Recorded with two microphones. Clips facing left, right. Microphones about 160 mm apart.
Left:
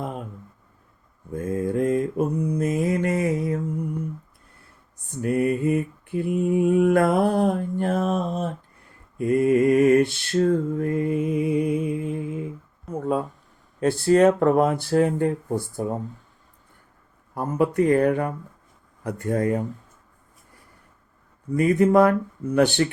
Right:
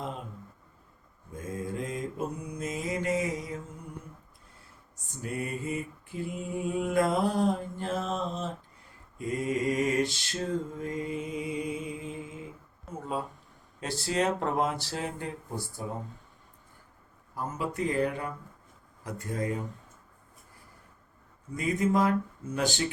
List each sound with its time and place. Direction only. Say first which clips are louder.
1.3 s mantra: left 11 dB; 60° left (ahead or behind)
5.1 s mantra: left 12 dB; 60° left (ahead or behind)
10.8 s music: left 10 dB; 60° left (ahead or behind)
12.9 s a sound: left 10 dB; 55° left (ahead or behind)
13.7 s speech: left 12 dB; 55° left (ahead or behind)
17.3 s speech: left 11 dB; 60° left (ahead or behind)
21.5 s speech: left 10 dB; 60° left (ahead or behind)